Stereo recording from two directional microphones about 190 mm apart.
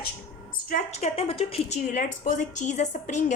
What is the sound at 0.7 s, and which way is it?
A woman's voice, 35° left (ahead or behind).